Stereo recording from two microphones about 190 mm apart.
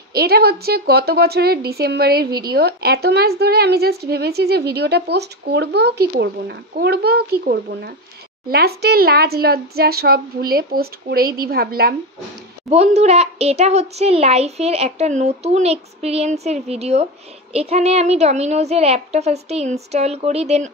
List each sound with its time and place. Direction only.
0.1 s a woman's voice: 55° right (ahead or behind)
12.6 s a child's voice: 35° right (ahead or behind)